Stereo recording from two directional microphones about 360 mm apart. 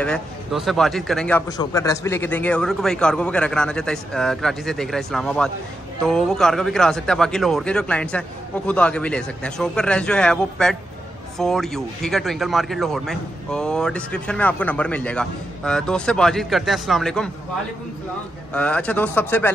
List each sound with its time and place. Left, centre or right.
0.0 s speech: centre
18.5 s speech: centre